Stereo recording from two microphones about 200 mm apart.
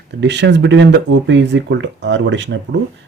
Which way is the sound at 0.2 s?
60° right (ahead or behind).